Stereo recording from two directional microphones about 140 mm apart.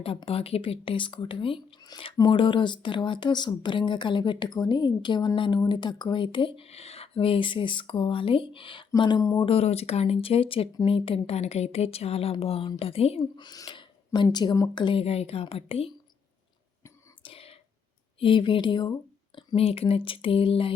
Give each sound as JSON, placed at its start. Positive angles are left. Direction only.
{"t": 0.0, "sound": "speech", "side_deg": 40}
{"t": 9.5, "sound": "a woman's voice", "side_deg": 45}
{"t": 13.3, "sound": "a sound", "side_deg": 30}
{"t": 14.3, "sound": "speech", "side_deg": 30}
{"t": 17.2, "sound": "whispering", "side_deg": 40}
{"t": 18.2, "sound": "speech", "side_deg": 35}